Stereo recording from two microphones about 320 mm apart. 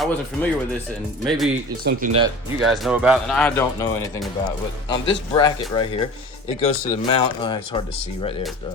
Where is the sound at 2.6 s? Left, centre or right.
Centre.